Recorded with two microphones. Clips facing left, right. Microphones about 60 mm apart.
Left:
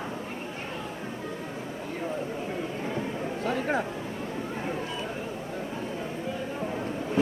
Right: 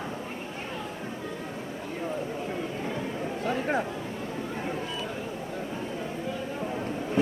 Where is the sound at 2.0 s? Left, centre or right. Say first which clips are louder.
Even; centre.